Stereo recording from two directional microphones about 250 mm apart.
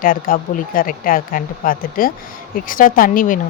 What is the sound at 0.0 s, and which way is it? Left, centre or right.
Speech, left.